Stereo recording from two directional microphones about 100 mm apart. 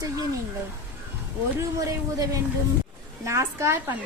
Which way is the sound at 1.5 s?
30° right (ahead or behind).